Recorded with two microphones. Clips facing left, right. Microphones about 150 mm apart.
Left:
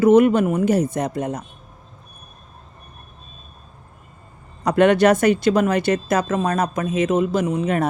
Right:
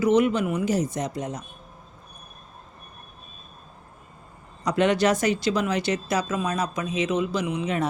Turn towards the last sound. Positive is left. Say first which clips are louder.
# left 6 dB
turn(degrees=50)  # may be behind; listen again after turning